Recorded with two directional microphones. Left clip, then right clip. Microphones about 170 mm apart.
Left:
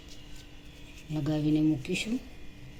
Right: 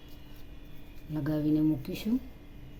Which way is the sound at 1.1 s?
60° right (ahead or behind).